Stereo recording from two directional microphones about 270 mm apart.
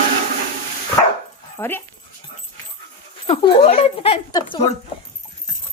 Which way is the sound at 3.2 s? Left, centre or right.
Left.